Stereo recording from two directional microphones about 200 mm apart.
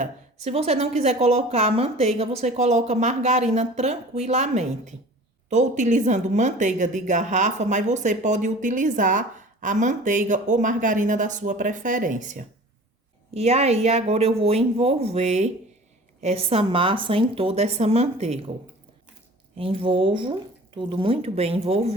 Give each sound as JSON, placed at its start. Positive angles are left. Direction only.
{"t": 0.0, "sound": "a woman's voice", "side_deg": -35}
{"t": 19.5, "sound": "speech", "side_deg": -25}